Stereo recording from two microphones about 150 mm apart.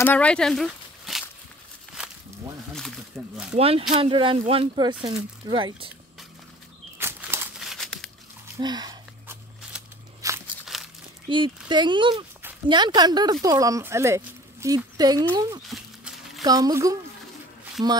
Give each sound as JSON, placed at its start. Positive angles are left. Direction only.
{"t": 0.0, "sound": "speech", "side_deg": 10}
{"t": 2.0, "sound": "a sound", "side_deg": -5}
{"t": 2.7, "sound": "speech", "side_deg": 5}
{"t": 3.5, "sound": "speech", "side_deg": -40}
{"t": 7.0, "sound": "a sound", "side_deg": -15}
{"t": 7.5, "sound": "crumpling", "side_deg": 0}
{"t": 8.5, "sound": "speech", "side_deg": -30}
{"t": 9.3, "sound": "scissors", "side_deg": -5}
{"t": 10.2, "sound": "a sound", "side_deg": -20}
{"t": 10.6, "sound": "crumpling", "side_deg": 0}
{"t": 11.2, "sound": "speech", "side_deg": -30}
{"t": 15.7, "sound": "a sound", "side_deg": 0}
{"t": 16.4, "sound": "speech", "side_deg": -25}